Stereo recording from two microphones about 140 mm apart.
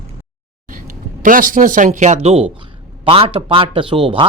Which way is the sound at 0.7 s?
75° right (ahead or behind).